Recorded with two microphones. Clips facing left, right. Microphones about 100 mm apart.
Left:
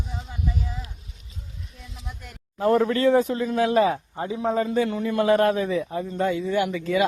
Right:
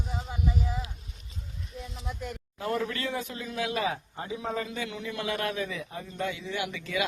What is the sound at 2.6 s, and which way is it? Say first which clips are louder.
A man's voice: left 11 dB; 45° left (ahead or behind).